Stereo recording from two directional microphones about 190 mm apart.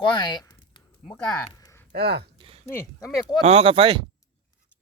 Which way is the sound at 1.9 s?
60° right (ahead or behind).